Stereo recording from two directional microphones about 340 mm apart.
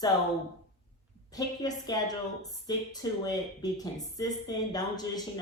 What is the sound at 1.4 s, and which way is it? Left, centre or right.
A woman's voice, centre.